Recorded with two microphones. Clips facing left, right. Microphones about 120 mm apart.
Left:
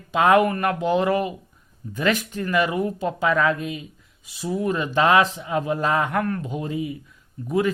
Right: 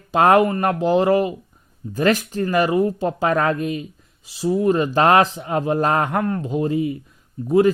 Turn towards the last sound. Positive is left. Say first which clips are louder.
# right 7 dB
turn(degrees=-30)  # may be behind; listen again after turning